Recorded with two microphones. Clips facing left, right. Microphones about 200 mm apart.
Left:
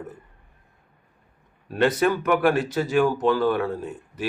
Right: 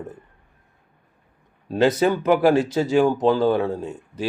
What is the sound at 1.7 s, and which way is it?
Speech, 25° right (ahead or behind).